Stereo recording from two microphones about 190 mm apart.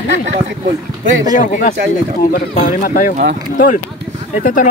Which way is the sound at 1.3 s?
45° left (ahead or behind).